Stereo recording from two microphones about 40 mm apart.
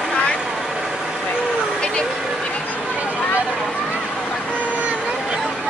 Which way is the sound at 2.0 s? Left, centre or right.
Centre.